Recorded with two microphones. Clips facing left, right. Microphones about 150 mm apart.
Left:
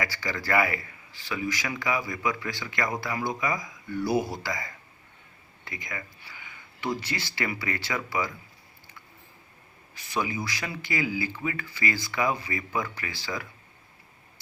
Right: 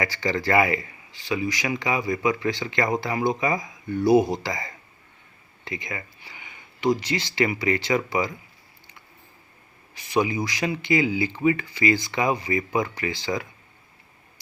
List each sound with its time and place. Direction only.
0.0 s speech: 25° right (ahead or behind)
10.0 s speech: 15° right (ahead or behind)